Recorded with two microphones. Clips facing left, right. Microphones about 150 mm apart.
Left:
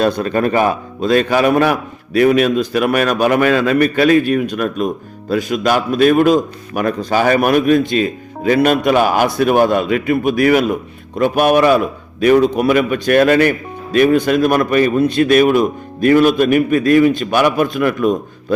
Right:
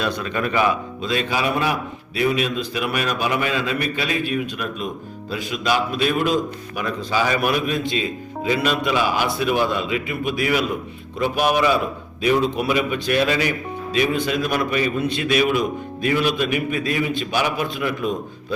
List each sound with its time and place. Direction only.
0.0 s a man's voice: 45° left (ahead or behind)